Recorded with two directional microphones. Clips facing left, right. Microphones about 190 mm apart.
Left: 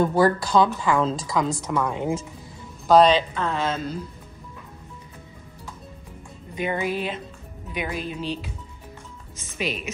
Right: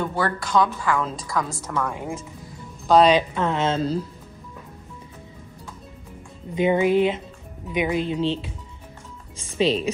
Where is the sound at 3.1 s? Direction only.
15° right (ahead or behind).